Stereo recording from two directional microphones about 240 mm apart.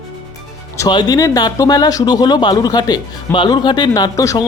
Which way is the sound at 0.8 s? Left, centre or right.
Centre.